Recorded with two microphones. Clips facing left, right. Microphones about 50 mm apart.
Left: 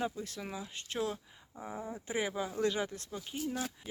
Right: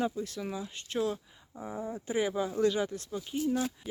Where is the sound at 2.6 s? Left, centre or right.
Left.